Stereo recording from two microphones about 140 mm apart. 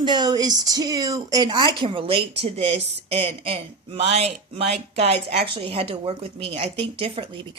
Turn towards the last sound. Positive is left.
turn(degrees=-40)  # may be behind; listen again after turning